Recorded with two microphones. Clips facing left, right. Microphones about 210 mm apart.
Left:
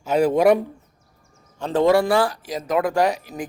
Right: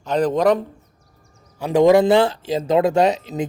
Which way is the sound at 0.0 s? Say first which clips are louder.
Left 1 dB; 10° left (ahead or behind).